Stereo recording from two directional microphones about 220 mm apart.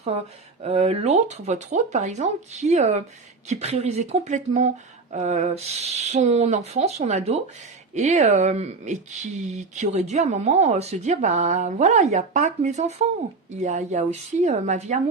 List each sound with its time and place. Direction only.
0.6 s speech: 30° right (ahead or behind)